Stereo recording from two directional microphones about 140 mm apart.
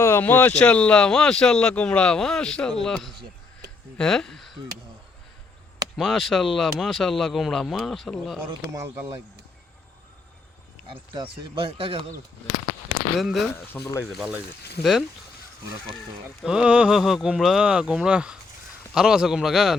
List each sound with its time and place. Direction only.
0.0 s speech: 15° left (ahead or behind)
6.0 s speech: centre (ahead or behind)
8.7 s speech: 20° right (ahead or behind)
11.1 s speech: 35° right (ahead or behind)
13.1 s speech: centre (ahead or behind)
16.4 s speech: 5° right (ahead or behind)